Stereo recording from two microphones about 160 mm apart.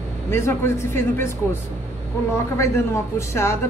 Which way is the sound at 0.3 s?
15° left (ahead or behind).